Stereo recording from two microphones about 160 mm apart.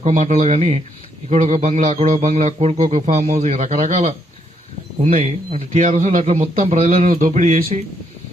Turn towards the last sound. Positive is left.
turn(degrees=-45)  # may be behind; listen again after turning